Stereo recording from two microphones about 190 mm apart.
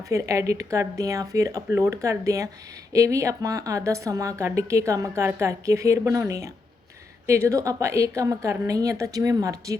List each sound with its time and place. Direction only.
0.0 s a woman's voice: 15° right (ahead or behind)